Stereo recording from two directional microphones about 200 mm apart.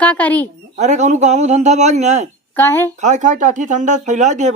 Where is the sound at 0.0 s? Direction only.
10° left (ahead or behind).